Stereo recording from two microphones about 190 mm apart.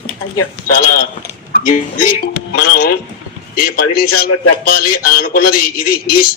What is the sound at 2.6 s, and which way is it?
A man's voice, 50° left (ahead or behind).